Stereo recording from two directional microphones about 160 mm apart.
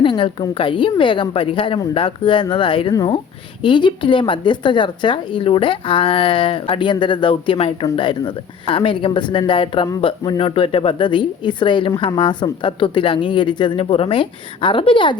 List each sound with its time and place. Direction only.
0.0 s speech: 30° left (ahead or behind)